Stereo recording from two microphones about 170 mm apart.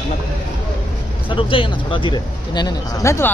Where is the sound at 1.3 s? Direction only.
30° left (ahead or behind).